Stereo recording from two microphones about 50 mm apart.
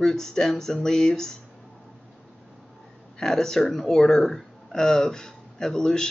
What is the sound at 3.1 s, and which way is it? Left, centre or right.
Speech, centre.